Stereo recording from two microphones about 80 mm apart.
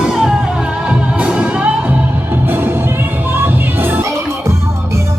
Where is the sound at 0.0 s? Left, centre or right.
Centre; by 4.0 s right.